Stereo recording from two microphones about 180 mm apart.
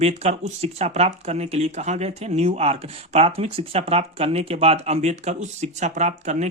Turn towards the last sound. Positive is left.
turn(degrees=-40)  # may be behind; listen again after turning